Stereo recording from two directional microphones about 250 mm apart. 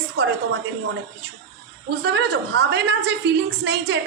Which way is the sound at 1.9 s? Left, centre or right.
Right.